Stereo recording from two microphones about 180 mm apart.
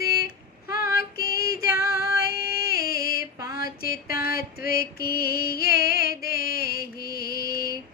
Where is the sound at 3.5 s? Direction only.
55° left (ahead or behind).